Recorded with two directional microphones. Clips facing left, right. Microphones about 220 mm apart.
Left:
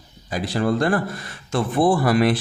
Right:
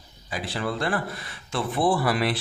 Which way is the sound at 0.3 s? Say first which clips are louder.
Left 8 dB; 40° left (ahead or behind).